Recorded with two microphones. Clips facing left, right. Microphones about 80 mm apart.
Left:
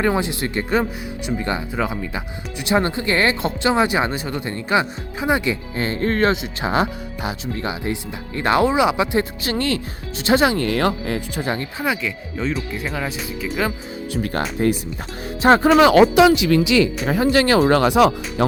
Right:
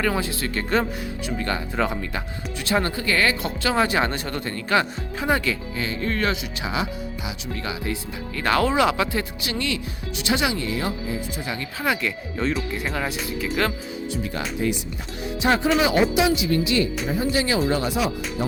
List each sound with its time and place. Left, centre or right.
0.0 s speech: left
1.7 s speech: centre
5.7 s speech: left
6.3 s speech: left
6.7 s speech: left
7.4 s speech: left; by 9.0 s centre
9.1 s speech: left
10.6 s speech: left
11.3 s speech: left
11.9 s speech: centre
14.1 s speech: left
15.8 s speech: left